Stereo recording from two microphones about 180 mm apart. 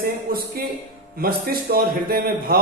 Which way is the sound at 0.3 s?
55° right (ahead or behind).